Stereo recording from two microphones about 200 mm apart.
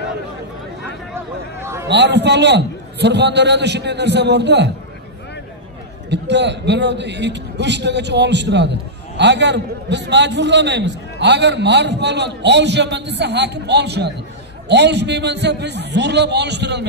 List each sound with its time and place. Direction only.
1.1 s a sound: 10° right (ahead or behind)
1.9 s a man's voice: 60° right (ahead or behind)
6.0 s a man's voice: 60° right (ahead or behind)